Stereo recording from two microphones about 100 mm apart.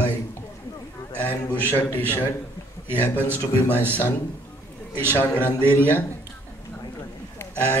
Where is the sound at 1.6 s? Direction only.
20° left (ahead or behind).